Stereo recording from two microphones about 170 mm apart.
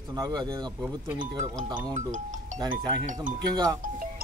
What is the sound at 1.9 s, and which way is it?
Speech, 45° right (ahead or behind).